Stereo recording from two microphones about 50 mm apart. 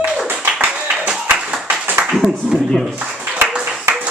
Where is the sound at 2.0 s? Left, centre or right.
Centre.